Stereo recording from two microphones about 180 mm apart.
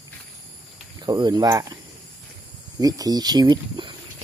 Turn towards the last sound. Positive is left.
turn(degrees=-25)  # may be behind; listen again after turning